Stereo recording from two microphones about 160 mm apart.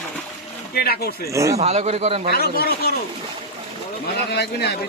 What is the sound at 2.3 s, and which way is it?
Speech, 75° left (ahead or behind).